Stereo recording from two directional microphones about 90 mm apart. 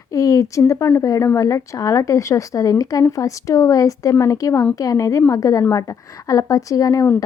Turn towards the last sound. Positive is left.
turn(degrees=40)  # may be behind; listen again after turning